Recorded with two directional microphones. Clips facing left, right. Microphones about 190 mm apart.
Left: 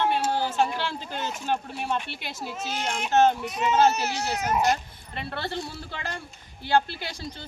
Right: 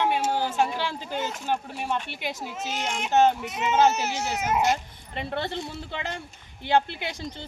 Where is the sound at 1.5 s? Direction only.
10° right (ahead or behind).